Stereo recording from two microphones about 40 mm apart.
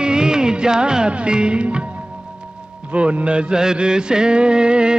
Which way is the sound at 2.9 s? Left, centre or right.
Right.